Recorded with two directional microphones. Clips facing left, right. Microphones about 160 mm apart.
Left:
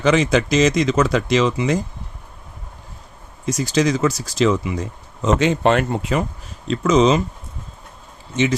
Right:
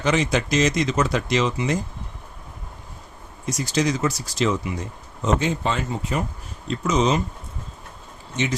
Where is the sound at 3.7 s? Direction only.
90° left.